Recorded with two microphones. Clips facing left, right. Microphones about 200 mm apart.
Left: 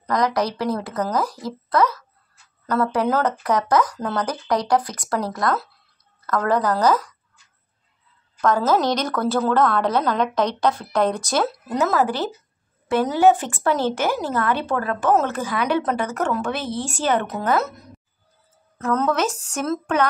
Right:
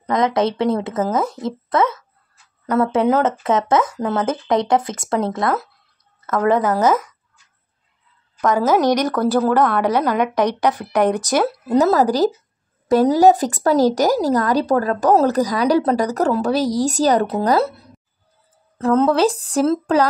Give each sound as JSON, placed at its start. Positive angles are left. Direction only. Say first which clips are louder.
{"t": 0.0, "sound": "speech", "louder": "right 4 dB", "side_deg": -25}
{"t": 8.4, "sound": "a woman's voice", "louder": "right 3 dB", "side_deg": -15}
{"t": 11.7, "sound": "speech", "louder": "right 6 dB", "side_deg": -40}